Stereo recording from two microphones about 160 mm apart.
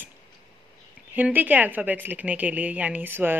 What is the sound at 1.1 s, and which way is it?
Speech, 10° right (ahead or behind).